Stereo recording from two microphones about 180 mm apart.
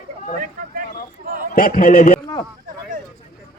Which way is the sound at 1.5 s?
50° left (ahead or behind).